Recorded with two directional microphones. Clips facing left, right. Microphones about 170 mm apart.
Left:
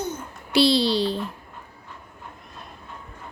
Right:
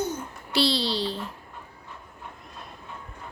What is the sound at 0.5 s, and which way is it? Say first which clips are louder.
Speech: left 6 dB; 15° left (ahead or behind).